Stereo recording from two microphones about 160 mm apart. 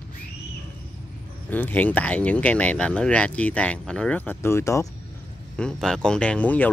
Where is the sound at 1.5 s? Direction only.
10° left (ahead or behind).